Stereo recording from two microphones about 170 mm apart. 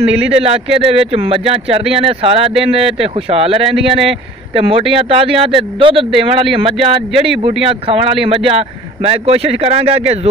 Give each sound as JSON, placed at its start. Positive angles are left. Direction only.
{"t": 0.0, "sound": "speech", "side_deg": -35}